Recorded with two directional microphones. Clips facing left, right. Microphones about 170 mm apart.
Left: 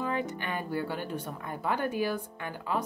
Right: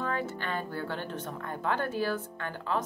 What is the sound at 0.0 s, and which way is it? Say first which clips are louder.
Speech: left 1 dB; 15° left (ahead or behind).